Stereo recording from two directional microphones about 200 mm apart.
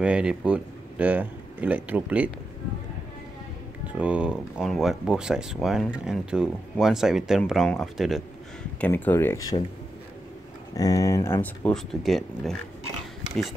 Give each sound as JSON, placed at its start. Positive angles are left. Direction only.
{"t": 0.0, "sound": "speech", "side_deg": -5}
{"t": 4.0, "sound": "speech", "side_deg": -5}
{"t": 10.8, "sound": "speech", "side_deg": 15}
{"t": 11.6, "sound": "speech", "side_deg": 0}